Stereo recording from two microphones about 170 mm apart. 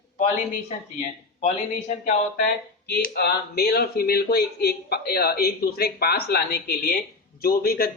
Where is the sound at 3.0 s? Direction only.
65° left (ahead or behind).